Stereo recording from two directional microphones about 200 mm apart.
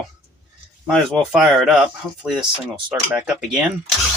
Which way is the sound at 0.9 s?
Centre (ahead or behind).